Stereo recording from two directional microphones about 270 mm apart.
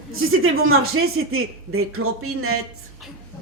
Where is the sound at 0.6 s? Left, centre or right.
Right.